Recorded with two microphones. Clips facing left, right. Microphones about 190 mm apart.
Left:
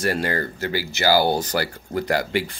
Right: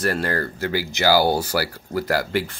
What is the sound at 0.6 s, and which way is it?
Speech, 15° right (ahead or behind).